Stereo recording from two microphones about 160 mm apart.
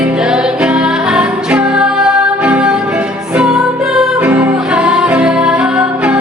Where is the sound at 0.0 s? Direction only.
5° right (ahead or behind).